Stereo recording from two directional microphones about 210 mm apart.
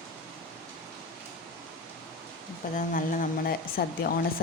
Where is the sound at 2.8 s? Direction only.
40° left (ahead or behind).